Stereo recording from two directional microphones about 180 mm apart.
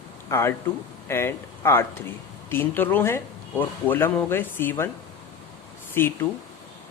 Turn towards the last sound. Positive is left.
turn(degrees=10)  # may be behind; listen again after turning